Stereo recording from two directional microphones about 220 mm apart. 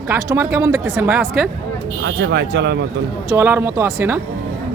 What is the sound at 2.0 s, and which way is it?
Speech, 50° right (ahead or behind).